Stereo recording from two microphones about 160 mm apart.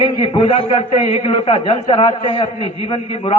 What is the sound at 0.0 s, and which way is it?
A man's voice, 35° left (ahead or behind).